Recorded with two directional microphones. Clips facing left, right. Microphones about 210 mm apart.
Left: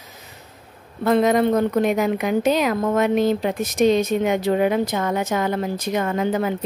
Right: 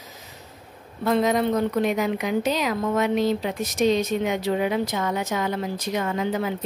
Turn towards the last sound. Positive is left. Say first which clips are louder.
# left 4 dB
turn(degrees=50)  # may be behind; listen again after turning